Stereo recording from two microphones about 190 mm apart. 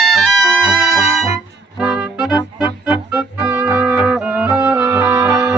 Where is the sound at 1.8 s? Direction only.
5° right (ahead or behind).